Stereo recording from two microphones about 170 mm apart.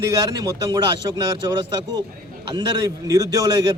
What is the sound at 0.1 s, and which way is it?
Speech, 20° right (ahead or behind).